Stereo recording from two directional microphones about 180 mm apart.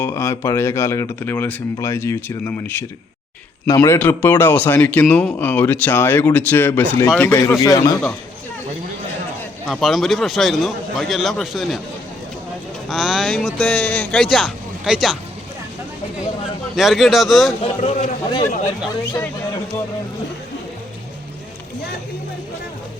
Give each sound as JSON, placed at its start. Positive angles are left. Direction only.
{"t": 0.0, "sound": "speech", "side_deg": 15}
{"t": 9.6, "sound": "speech", "side_deg": 0}
{"t": 12.9, "sound": "speech", "side_deg": 0}
{"t": 16.7, "sound": "speech", "side_deg": 0}
{"t": 17.6, "sound": "a man's voice", "side_deg": 35}